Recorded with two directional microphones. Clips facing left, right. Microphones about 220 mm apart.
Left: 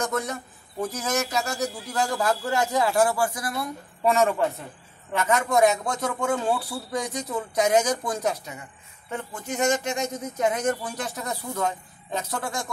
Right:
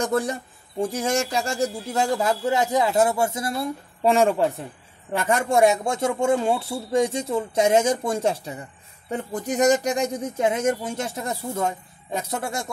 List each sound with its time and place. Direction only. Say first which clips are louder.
0.0 s a man's voice: right 4 dB; 30° right (ahead or behind)